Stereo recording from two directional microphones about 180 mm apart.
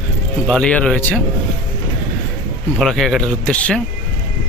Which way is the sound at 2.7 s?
Centre (ahead or behind).